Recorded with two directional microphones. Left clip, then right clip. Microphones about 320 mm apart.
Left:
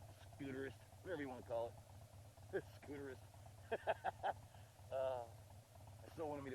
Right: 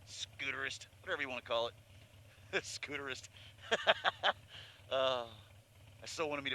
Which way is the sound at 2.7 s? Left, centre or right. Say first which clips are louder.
Right 11 dB; right.